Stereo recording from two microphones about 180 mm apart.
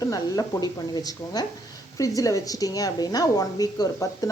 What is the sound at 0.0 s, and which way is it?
Speech, 20° left (ahead or behind).